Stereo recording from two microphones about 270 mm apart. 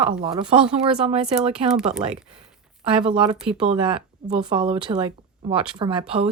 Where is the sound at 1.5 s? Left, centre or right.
Centre.